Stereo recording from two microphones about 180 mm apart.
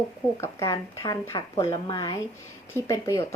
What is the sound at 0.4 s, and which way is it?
A woman's voice, 15° left (ahead or behind).